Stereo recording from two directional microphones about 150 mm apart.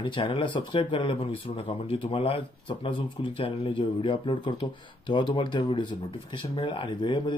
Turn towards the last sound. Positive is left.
turn(degrees=30)  # may be behind; listen again after turning